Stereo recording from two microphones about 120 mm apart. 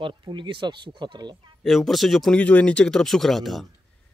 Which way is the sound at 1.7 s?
Centre (ahead or behind).